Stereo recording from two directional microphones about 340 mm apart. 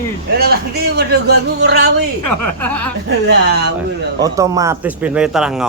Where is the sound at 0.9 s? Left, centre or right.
Right.